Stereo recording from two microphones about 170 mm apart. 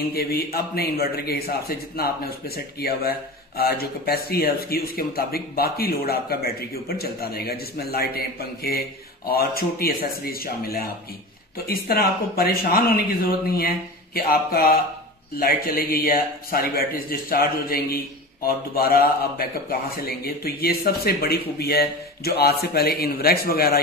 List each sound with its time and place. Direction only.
0.1 s a man's voice: 65° left (ahead or behind)